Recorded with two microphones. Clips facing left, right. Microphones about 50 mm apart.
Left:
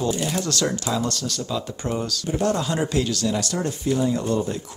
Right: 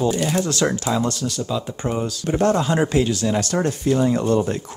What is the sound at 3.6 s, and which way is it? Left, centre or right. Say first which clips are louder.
Speech: right 3 dB; right.